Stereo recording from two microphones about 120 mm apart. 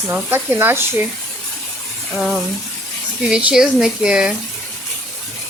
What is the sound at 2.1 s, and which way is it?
Speech, centre (ahead or behind).